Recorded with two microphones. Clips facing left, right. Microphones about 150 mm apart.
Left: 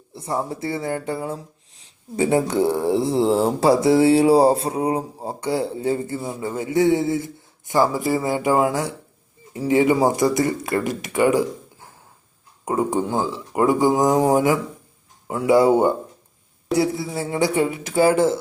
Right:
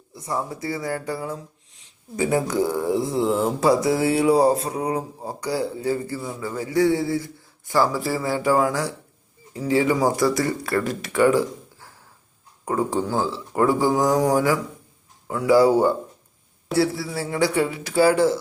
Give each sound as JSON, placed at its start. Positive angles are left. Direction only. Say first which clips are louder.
{"t": 0.1, "sound": "speech", "louder": "left 2 dB", "side_deg": 25}